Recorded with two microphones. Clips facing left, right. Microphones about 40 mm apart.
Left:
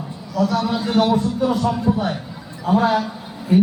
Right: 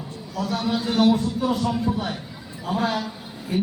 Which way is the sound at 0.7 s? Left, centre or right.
Centre.